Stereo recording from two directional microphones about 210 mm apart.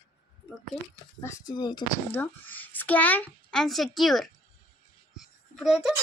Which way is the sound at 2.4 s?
10° left (ahead or behind).